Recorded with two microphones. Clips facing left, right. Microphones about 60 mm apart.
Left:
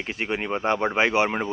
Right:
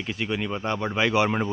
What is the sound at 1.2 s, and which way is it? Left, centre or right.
Speech, centre.